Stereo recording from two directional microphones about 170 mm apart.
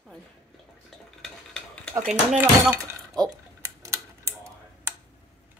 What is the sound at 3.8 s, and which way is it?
Typewriter, 15° right (ahead or behind).